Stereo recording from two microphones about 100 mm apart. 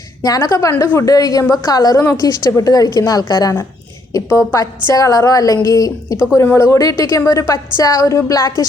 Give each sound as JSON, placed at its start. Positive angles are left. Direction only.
{"t": 0.2, "sound": "a woman's voice", "side_deg": 40}
{"t": 4.1, "sound": "a woman's voice", "side_deg": 30}
{"t": 6.1, "sound": "a woman's voice", "side_deg": 25}